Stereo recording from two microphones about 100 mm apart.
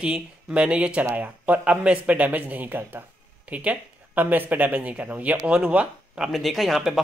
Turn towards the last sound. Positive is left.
turn(degrees=0)  # may be behind; listen again after turning